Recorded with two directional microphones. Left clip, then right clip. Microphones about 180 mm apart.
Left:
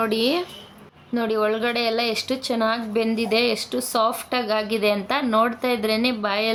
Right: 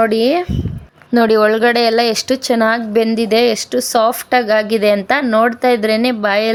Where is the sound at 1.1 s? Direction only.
45° right (ahead or behind).